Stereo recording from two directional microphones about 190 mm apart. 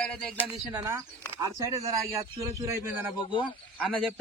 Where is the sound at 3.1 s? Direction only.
25° left (ahead or behind).